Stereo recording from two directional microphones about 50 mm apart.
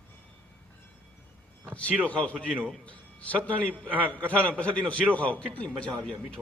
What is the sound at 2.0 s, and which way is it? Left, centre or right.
Speech, left.